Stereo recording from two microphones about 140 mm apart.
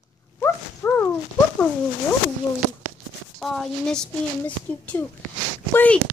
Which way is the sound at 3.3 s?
Centre (ahead or behind).